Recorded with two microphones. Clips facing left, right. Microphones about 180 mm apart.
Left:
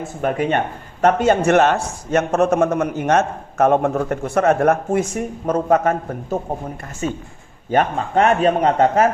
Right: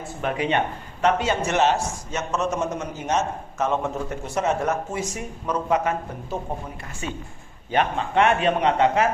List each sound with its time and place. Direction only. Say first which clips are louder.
0.0 s a man's voice: left 5 dB; 45° left (ahead or behind)